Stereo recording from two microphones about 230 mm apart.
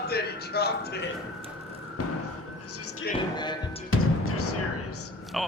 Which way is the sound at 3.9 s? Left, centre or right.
Left.